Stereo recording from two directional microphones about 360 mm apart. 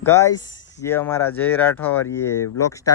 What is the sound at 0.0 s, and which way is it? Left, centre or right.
Speech, centre.